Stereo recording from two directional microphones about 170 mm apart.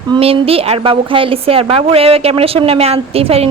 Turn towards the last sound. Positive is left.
turn(degrees=-35)  # may be behind; listen again after turning